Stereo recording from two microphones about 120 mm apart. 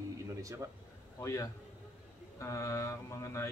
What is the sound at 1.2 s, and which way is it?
Speech, 25° left (ahead or behind).